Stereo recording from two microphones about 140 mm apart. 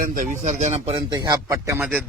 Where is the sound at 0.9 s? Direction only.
30° right (ahead or behind).